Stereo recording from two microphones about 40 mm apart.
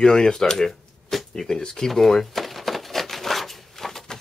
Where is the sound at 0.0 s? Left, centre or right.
Centre.